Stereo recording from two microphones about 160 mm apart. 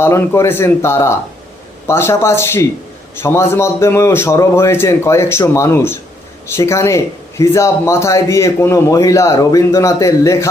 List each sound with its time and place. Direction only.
0.0 s a man's voice: 15° left (ahead or behind)